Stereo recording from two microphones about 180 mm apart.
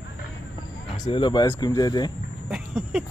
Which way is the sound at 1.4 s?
15° left (ahead or behind).